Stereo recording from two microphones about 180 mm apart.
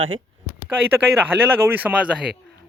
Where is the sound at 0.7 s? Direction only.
10° right (ahead or behind).